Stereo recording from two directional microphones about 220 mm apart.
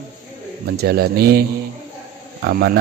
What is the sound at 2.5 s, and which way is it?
Speech, 45° right (ahead or behind).